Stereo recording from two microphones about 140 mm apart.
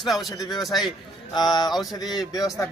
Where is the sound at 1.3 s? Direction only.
30° left (ahead or behind).